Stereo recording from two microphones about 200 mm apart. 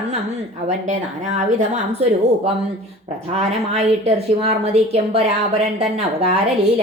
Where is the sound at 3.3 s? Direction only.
35° right (ahead or behind).